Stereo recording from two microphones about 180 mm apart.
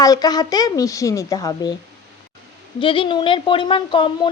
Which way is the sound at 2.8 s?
30° left (ahead or behind).